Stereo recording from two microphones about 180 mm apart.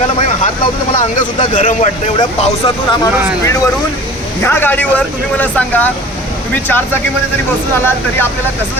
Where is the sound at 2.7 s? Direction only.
30° left (ahead or behind).